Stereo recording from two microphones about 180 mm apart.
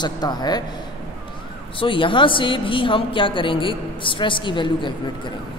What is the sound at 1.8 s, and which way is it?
A woman's voice, 30° left (ahead or behind).